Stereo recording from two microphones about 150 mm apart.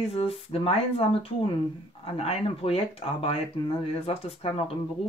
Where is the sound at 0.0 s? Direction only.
40° left (ahead or behind).